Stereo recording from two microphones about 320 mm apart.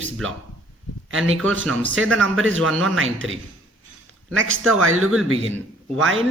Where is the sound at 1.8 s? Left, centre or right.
Right.